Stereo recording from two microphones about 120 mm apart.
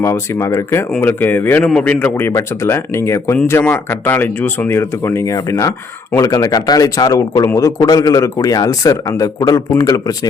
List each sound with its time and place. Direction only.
0.0 s a man's voice: 25° left (ahead or behind)